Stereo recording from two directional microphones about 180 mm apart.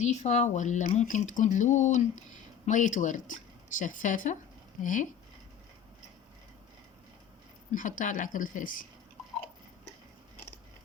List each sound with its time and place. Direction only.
0.0 s a woman's voice: 40° left (ahead or behind)
7.7 s a woman's voice: 45° left (ahead or behind)